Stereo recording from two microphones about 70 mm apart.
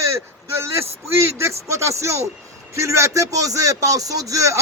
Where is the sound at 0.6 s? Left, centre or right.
Right.